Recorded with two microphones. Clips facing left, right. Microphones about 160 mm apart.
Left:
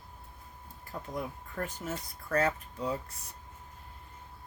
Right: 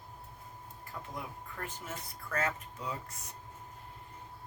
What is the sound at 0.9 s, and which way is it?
Speech, 35° left (ahead or behind).